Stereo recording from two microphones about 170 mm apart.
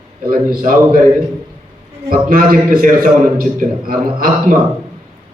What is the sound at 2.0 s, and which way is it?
A man's voice, 55° right (ahead or behind).